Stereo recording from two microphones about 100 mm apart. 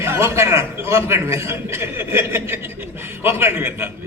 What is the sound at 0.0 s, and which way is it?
A man's voice, 25° right (ahead or behind).